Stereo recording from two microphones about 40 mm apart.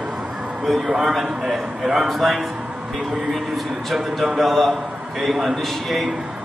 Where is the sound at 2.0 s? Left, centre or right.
Centre.